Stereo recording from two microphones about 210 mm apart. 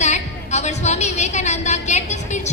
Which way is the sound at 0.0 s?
35° left (ahead or behind).